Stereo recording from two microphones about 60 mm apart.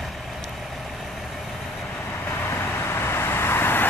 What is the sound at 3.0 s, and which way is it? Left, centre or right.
Vehicle, left.